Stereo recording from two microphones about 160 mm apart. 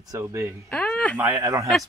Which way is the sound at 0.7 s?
10° left (ahead or behind).